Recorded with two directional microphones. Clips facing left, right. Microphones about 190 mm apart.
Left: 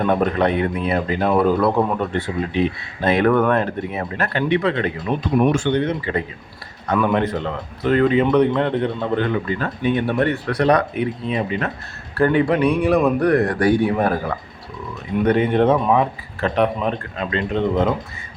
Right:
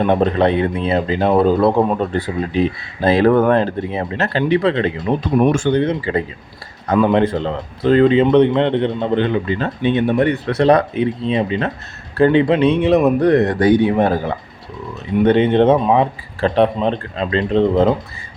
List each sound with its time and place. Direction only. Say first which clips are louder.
0.0 s speech: right 3 dB; 25° right (ahead or behind)
2.1 s speech: right 3 dB; 35° right (ahead or behind)
5.4 s speech: right 3 dB; 45° right (ahead or behind)